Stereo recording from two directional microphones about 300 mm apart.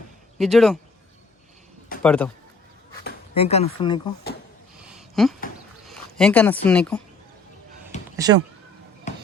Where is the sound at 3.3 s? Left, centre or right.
Left.